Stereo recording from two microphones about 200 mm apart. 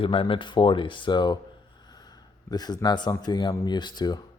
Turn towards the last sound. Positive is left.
turn(degrees=20)  # may be behind; listen again after turning